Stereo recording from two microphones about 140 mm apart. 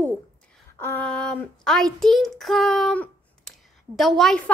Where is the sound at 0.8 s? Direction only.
20° left (ahead or behind).